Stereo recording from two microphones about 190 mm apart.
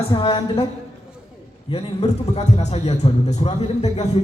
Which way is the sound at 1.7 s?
35° left (ahead or behind).